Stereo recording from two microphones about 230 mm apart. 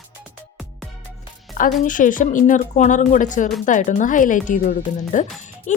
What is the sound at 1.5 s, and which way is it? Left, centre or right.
Speech, left.